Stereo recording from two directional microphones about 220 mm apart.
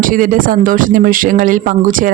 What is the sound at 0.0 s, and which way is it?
Speech, 40° right (ahead or behind).